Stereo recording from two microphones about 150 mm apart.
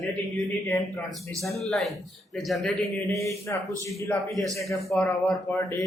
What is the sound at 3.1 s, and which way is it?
Speech, 20° left (ahead or behind).